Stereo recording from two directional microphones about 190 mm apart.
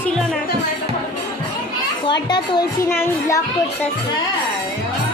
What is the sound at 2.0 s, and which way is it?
A woman's voice, 25° left (ahead or behind).